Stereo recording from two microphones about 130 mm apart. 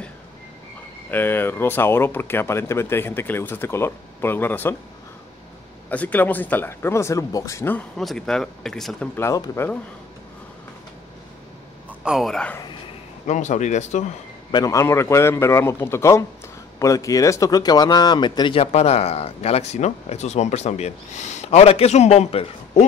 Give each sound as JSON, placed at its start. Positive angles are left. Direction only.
{"t": 1.1, "sound": "speech", "side_deg": 15}
{"t": 5.9, "sound": "speech", "side_deg": 10}
{"t": 8.0, "sound": "speech", "side_deg": 0}
{"t": 9.1, "sound": "a man's voice", "side_deg": 20}
{"t": 12.0, "sound": "speech", "side_deg": -5}
{"t": 13.3, "sound": "speech", "side_deg": 65}
{"t": 14.5, "sound": "a man's voice", "side_deg": 25}